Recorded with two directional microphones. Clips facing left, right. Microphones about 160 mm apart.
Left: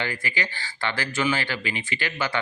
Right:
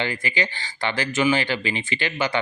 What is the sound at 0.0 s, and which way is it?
Speech, 20° right (ahead or behind).